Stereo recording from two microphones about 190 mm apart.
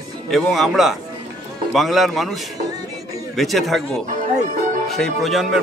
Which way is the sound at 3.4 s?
Centre (ahead or behind).